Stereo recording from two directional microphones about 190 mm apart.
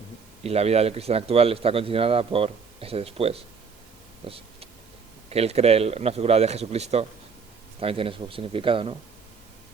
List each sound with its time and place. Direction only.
0.4 s speech: 35° right (ahead or behind)
4.2 s vehicle: 30° right (ahead or behind)
5.3 s speech: 35° right (ahead or behind)